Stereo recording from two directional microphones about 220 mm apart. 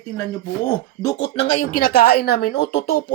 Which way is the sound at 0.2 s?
10° left (ahead or behind).